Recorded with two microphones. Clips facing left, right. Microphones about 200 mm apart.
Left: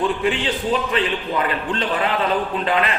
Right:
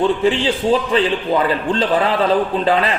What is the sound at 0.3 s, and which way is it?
A man's voice, 30° right (ahead or behind).